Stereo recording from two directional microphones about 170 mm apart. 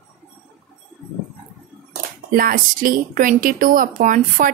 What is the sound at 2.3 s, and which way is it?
A woman's voice, 55° right (ahead or behind).